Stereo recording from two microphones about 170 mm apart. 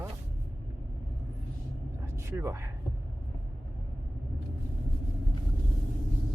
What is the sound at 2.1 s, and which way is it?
Speech, 15° right (ahead or behind).